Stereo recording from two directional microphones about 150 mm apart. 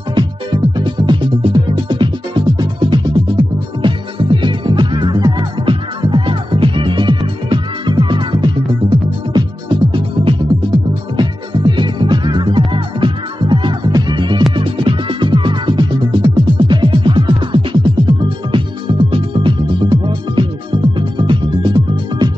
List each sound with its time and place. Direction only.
0.7 s music: 30° right (ahead or behind)